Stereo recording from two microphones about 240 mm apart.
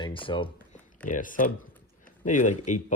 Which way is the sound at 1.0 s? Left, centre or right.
Left.